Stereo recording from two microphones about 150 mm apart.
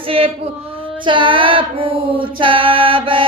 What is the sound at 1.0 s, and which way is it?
Female singing, 35° right (ahead or behind).